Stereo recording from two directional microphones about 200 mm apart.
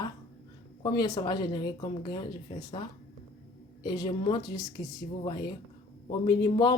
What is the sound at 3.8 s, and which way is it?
A man's voice, 20° left (ahead or behind).